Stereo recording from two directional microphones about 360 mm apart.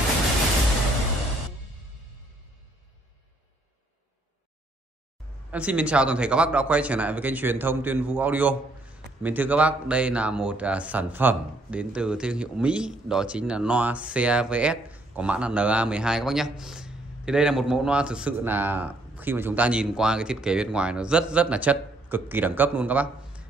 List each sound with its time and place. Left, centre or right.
5.5 s speech: centre